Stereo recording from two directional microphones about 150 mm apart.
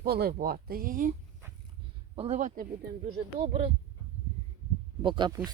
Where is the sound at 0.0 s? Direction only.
90° right; by 1.1 s 65° right (ahead or behind).